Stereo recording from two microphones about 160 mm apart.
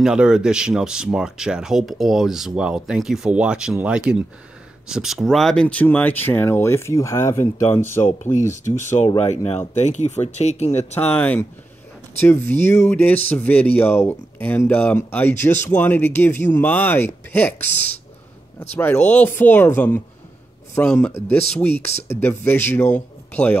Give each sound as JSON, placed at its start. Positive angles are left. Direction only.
{"t": 0.0, "sound": "speech", "side_deg": -5}
{"t": 8.0, "sound": "speech", "side_deg": 50}
{"t": 11.0, "sound": "speech", "side_deg": 10}